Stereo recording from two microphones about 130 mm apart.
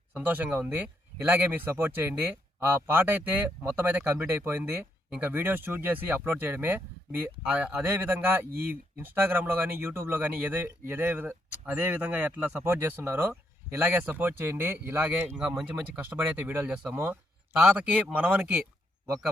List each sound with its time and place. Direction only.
0.2 s speech: 15° right (ahead or behind)